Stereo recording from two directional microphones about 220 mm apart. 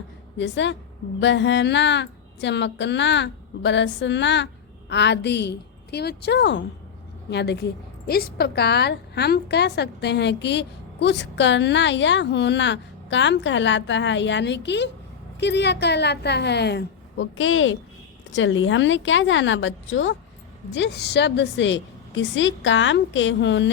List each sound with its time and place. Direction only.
0.3 s a woman's voice: 55° left (ahead or behind)